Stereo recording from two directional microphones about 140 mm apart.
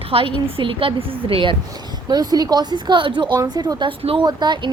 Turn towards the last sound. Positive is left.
turn(degrees=-30)  # may be behind; listen again after turning